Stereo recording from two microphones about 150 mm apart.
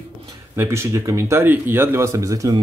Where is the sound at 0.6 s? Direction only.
20° right (ahead or behind).